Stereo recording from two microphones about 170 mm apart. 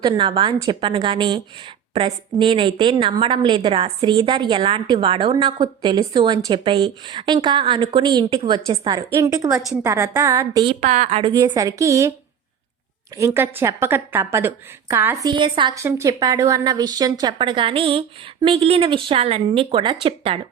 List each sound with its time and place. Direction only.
0.0 s a woman's voice: 30° right (ahead or behind)
10.8 s a woman's voice: 40° right (ahead or behind); by 12.1 s 20° right (ahead or behind)
13.1 s a woman's voice: 15° right (ahead or behind)
15.8 s a woman's voice: 15° right (ahead or behind); by 20.4 s 35° right (ahead or behind)